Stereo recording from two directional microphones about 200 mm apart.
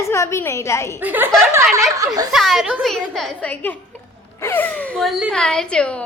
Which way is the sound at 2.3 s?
Centre (ahead or behind).